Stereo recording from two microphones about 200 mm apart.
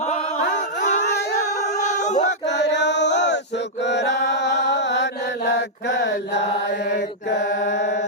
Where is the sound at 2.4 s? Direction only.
60° left (ahead or behind).